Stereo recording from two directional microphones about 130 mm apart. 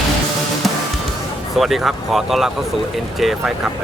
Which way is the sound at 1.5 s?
Centre (ahead or behind).